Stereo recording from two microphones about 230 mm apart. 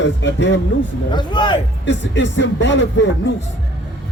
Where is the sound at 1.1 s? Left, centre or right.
Centre.